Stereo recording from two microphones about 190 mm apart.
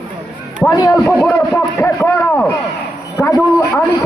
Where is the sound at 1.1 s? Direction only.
Centre (ahead or behind).